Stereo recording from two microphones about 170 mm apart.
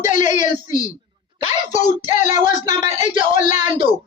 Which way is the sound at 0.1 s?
45° left (ahead or behind).